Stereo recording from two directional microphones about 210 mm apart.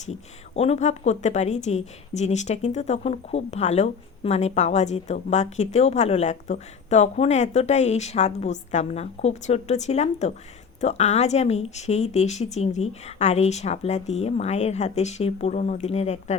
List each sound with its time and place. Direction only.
0.0 s speech: 30° left (ahead or behind)